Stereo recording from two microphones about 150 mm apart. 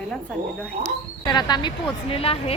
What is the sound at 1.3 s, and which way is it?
A woman's voice, 30° left (ahead or behind).